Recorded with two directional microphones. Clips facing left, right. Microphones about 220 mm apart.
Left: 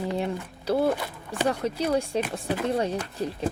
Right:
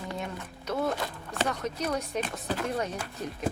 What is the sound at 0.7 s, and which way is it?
Speech, 30° left (ahead or behind).